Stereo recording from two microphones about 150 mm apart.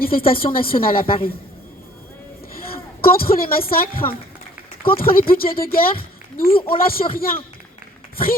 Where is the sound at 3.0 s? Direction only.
80° left.